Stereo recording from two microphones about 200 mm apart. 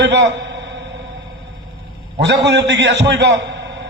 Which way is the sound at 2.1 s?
60° right (ahead or behind).